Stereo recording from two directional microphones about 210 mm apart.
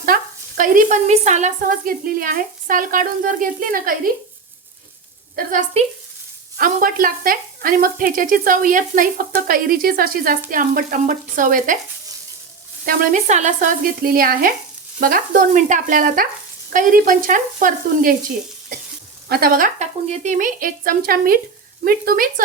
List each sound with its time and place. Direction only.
0.0 s speech: 40° right (ahead or behind)
5.5 s speech: 35° right (ahead or behind)
12.8 s speech: 40° right (ahead or behind)
19.3 s speech: 45° right (ahead or behind)